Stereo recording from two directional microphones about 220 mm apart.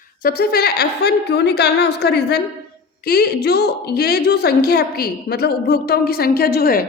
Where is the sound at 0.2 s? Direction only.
40° left (ahead or behind).